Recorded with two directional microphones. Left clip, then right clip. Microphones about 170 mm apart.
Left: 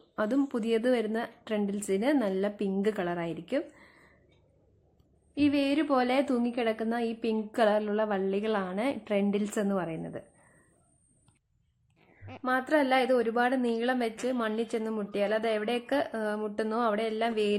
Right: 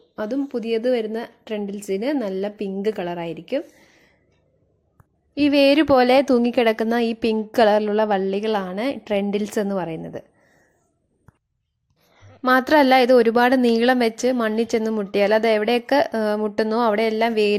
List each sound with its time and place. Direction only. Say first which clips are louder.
0.2 s a woman's voice: right 4 dB; 5° right (ahead or behind)
5.3 s a woman's voice: right 11 dB; 40° right (ahead or behind)
12.5 s a woman's voice: right 11 dB; 55° right (ahead or behind); by 17.6 s 35° right (ahead or behind)